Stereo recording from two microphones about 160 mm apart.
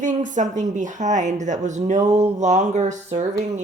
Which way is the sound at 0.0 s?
50° right (ahead or behind).